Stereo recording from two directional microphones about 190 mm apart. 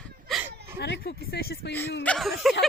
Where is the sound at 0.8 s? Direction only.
60° left (ahead or behind).